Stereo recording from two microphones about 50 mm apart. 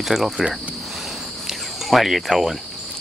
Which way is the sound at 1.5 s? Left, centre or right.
Centre.